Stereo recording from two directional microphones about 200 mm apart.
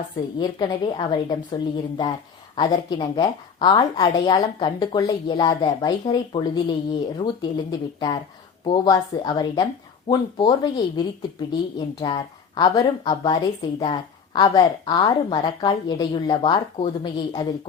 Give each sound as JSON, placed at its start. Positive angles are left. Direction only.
{"t": 0.3, "sound": "a woman's voice", "side_deg": 20}